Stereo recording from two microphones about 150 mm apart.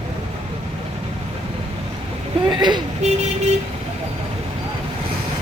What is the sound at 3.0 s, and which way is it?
Vehicle, 50° right (ahead or behind).